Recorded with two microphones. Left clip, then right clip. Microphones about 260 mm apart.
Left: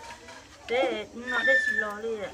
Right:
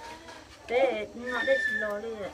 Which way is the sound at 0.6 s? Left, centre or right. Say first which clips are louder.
Right 1 dB; centre.